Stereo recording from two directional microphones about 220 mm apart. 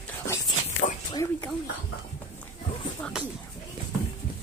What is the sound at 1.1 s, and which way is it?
Speech, 15° left (ahead or behind).